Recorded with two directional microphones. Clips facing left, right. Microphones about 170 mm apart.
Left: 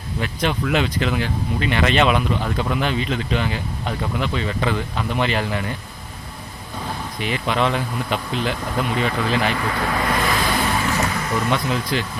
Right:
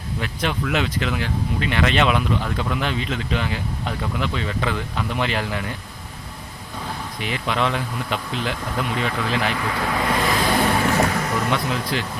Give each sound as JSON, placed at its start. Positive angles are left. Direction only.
{"t": 0.2, "sound": "speech", "side_deg": 0}
{"t": 7.2, "sound": "speech", "side_deg": 0}
{"t": 10.2, "sound": "a sound", "side_deg": -30}
{"t": 10.5, "sound": "vehicle", "side_deg": -50}
{"t": 11.5, "sound": "speech", "side_deg": 0}